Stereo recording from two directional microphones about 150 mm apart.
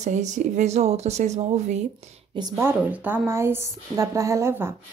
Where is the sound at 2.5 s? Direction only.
15° right (ahead or behind).